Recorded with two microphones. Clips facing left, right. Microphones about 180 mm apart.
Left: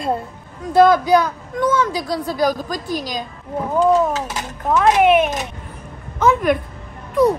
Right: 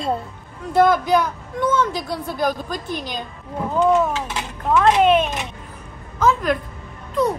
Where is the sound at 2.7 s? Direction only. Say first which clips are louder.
Left 3 dB; 40° left (ahead or behind).